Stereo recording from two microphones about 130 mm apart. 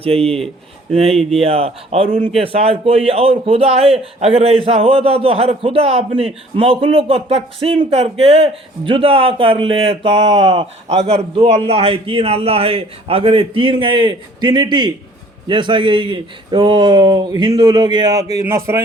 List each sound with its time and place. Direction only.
0.0 s a man's voice: 50° right (ahead or behind)
10.8 s a man's voice: 55° right (ahead or behind); by 18.8 s 20° right (ahead or behind)